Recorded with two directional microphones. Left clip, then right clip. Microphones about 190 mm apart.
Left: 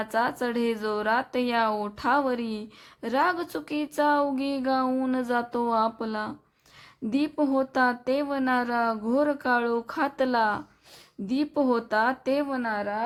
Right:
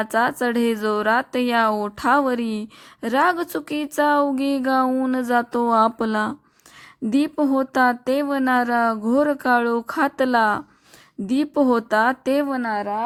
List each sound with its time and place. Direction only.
0.0 s speech: 30° right (ahead or behind)